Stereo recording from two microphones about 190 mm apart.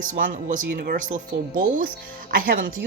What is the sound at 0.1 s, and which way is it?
A woman's voice, 45° right (ahead or behind).